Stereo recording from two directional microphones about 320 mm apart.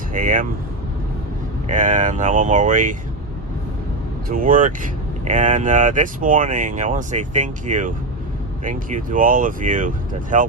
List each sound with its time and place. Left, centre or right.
0.1 s speech: right
1.6 s speech: right
4.3 s speech: right